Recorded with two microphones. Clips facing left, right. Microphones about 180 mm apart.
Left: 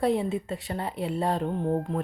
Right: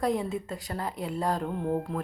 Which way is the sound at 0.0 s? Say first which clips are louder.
Left 3 dB; 30° left (ahead or behind).